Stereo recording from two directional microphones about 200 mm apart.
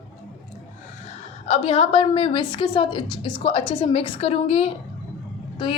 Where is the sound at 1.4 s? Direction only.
30° left (ahead or behind).